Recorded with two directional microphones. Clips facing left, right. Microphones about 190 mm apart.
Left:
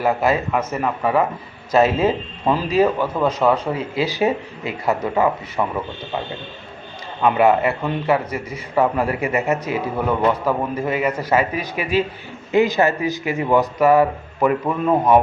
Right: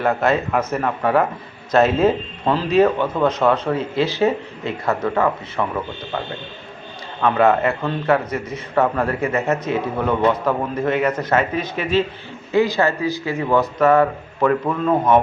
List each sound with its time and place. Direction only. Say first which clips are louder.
0.0 s a man's voice: even; 5° left (ahead or behind)
7.2 s a man's voice: even; 10° left (ahead or behind)